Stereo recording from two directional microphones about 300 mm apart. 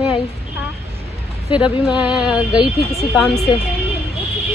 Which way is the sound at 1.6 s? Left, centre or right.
Centre.